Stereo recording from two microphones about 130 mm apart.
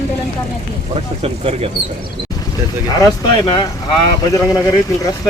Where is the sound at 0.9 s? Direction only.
50° right (ahead or behind).